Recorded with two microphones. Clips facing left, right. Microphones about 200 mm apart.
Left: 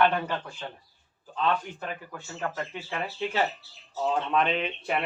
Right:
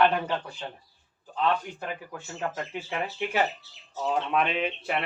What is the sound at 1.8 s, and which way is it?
Speech, 15° right (ahead or behind).